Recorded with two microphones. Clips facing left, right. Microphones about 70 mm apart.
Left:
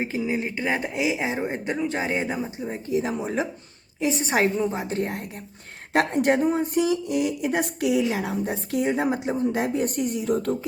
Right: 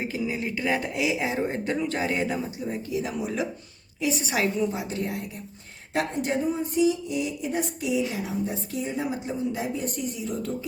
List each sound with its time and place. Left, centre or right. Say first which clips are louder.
0.0 s speech: left 3 dB; left
2.9 s a woman's voice: left 6 dB; left
5.9 s speech: left 6 dB; left